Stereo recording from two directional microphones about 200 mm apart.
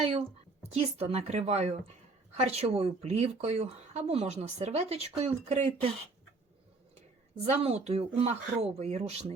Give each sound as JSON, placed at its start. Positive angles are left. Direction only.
{"t": 0.0, "sound": "a woman's voice", "side_deg": -30}
{"t": 7.5, "sound": "speech", "side_deg": -35}